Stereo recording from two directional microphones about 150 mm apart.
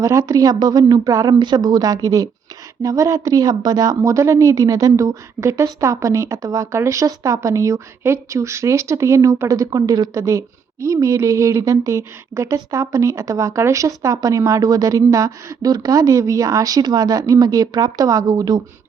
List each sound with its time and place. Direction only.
0.0 s a woman's voice: 20° right (ahead or behind)